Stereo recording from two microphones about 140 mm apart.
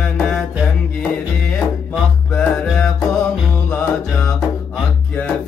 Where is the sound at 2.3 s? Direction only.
5° left (ahead or behind).